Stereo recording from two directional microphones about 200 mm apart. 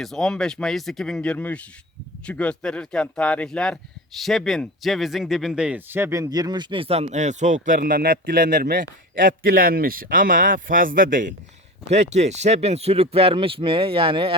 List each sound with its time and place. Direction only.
0.0 s speech: centre (ahead or behind); by 14.3 s 25° right (ahead or behind)